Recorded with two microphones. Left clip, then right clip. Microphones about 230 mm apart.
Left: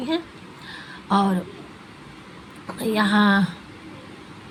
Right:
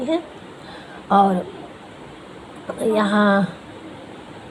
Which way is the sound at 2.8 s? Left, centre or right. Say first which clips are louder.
Right 3 dB; left.